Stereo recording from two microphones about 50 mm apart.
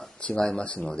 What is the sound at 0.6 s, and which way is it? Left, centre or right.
Speech, left.